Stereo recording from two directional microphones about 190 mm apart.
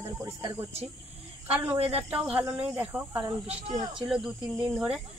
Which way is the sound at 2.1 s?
5° right (ahead or behind).